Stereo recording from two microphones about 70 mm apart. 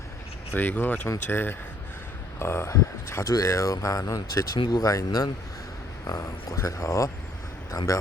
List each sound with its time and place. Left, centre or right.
0.5 s speech: left